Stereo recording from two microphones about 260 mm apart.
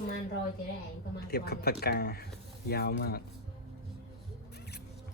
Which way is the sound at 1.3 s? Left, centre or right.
Left.